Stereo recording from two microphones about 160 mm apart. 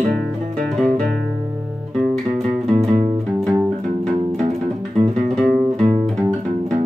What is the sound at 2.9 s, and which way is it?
Music, 40° right (ahead or behind).